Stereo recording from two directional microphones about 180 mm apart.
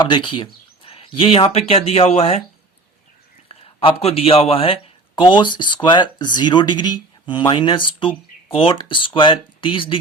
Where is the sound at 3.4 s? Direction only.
30° left (ahead or behind).